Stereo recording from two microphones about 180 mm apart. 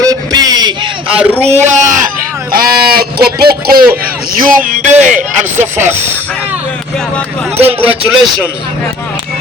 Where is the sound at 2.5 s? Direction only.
55° right (ahead or behind).